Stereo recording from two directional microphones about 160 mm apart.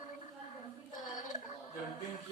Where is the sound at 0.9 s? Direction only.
25° left (ahead or behind).